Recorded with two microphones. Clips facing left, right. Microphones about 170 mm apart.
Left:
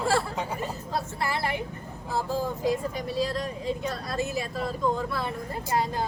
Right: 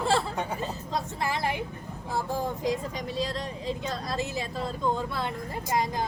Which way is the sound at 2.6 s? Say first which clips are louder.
Left 2 dB; 20° right (ahead or behind).